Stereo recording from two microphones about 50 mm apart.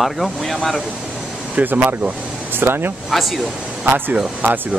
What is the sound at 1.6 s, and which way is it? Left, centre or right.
Speech, right.